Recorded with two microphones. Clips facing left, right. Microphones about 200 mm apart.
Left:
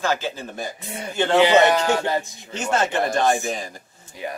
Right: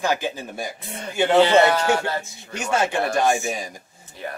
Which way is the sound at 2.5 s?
10° right (ahead or behind).